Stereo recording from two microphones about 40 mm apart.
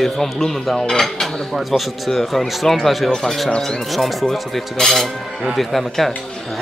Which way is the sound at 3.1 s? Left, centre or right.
Centre.